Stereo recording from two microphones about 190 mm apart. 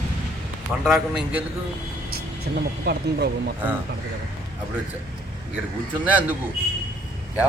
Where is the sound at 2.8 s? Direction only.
60° right (ahead or behind).